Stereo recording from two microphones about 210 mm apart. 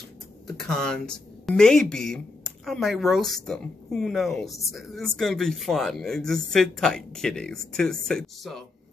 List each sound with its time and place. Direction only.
0.6 s a woman's voice: 5° left (ahead or behind)